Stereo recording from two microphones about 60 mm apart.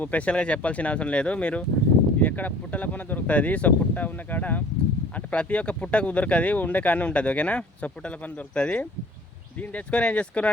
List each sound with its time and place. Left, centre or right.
0.0 s speech: left